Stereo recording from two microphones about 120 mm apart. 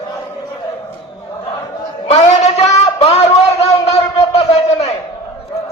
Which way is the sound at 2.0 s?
65° left (ahead or behind).